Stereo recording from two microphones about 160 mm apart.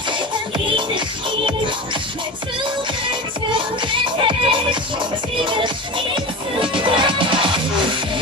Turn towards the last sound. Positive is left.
turn(degrees=-30)  # may be behind; listen again after turning